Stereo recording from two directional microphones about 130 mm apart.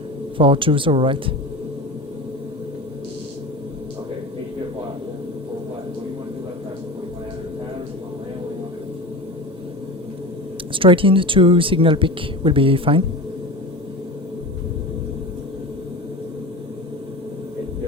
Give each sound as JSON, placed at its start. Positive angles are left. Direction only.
{"t": 0.3, "sound": "speech", "side_deg": -40}
{"t": 10.8, "sound": "speech", "side_deg": -40}